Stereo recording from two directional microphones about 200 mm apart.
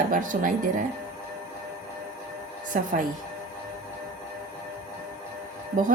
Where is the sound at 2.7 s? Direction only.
40° right (ahead or behind).